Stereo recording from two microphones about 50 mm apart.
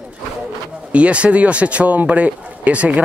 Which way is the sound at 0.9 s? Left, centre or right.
Right.